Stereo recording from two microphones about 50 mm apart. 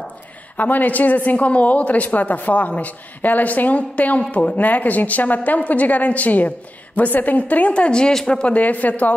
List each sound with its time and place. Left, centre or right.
0.6 s a woman's voice: left; by 8.4 s centre
8.4 s a woman's voice: left